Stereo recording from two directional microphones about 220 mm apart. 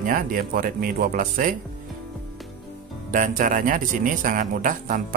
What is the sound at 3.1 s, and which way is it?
Speech, 35° right (ahead or behind).